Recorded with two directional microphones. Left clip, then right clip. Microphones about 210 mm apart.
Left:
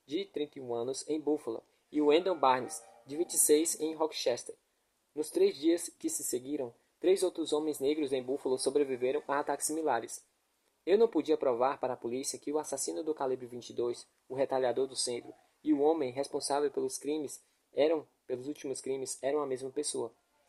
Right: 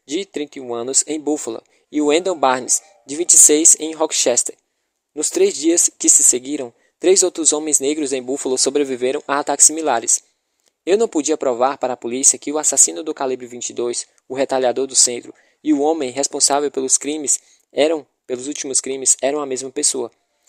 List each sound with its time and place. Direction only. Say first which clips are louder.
0.0 s speech: right 12 dB; 45° right (ahead or behind)